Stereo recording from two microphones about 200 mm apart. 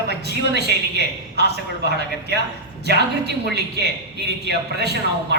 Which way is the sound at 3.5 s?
55° right (ahead or behind).